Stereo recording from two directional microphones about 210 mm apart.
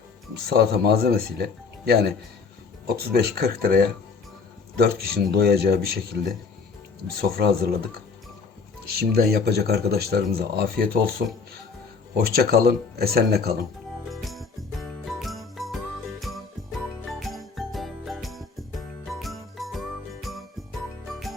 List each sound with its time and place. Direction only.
0.5 s speech: 50° right (ahead or behind)
7.2 s speech: 45° right (ahead or behind)
9.0 s speech: 45° right (ahead or behind)
12.1 s speech: 45° right (ahead or behind)
14.1 s jingle bell: centre (ahead or behind)
17.1 s jingle: centre (ahead or behind)
21.1 s music: centre (ahead or behind)